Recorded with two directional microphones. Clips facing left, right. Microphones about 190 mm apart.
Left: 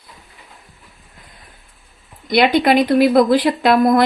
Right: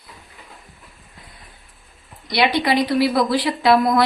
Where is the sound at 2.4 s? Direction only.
50° left (ahead or behind).